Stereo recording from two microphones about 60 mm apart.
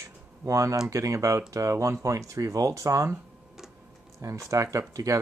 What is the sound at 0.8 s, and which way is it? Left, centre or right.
Speech, right.